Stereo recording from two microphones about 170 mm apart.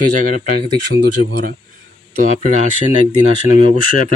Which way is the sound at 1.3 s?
70° right (ahead or behind).